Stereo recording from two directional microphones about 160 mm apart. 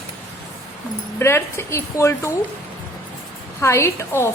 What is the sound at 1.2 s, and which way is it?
A woman's voice, 15° left (ahead or behind).